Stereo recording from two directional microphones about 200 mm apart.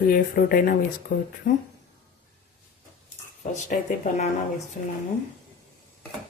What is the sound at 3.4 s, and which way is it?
Speech, 35° left (ahead or behind).